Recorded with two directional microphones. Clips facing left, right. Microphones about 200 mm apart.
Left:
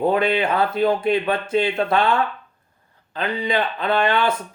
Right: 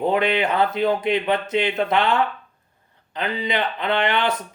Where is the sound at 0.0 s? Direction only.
20° right (ahead or behind).